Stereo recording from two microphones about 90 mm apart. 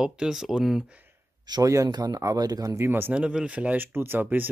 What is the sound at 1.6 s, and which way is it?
Speech, 40° right (ahead or behind).